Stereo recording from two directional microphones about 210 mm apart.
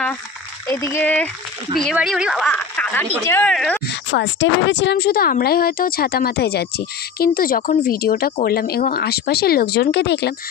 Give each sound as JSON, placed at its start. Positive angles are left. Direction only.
{"t": 0.7, "sound": "a woman's voice", "side_deg": 15}
{"t": 4.1, "sound": "speech", "side_deg": 60}